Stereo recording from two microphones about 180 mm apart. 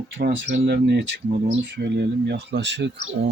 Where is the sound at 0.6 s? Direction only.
65° right (ahead or behind).